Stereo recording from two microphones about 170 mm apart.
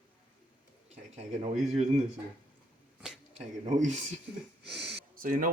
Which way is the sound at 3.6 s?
45° right (ahead or behind).